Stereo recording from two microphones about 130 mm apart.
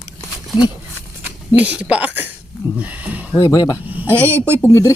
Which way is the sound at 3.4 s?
30° left (ahead or behind).